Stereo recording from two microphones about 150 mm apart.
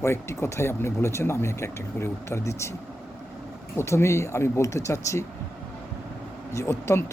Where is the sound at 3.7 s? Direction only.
20° left (ahead or behind).